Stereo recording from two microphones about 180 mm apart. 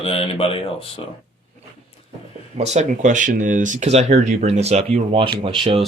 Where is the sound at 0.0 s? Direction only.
30° left (ahead or behind).